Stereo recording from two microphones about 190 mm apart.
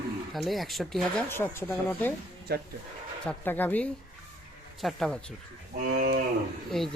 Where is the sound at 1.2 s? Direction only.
10° left (ahead or behind).